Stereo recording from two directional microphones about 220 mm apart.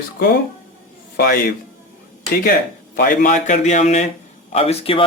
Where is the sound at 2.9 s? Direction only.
40° left (ahead or behind).